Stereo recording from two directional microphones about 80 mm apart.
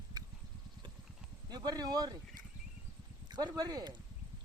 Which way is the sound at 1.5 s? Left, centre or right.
Right.